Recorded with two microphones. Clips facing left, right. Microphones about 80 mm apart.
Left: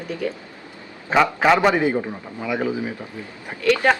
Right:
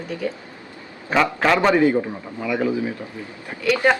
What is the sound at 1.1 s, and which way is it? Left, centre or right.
A man's voice, centre.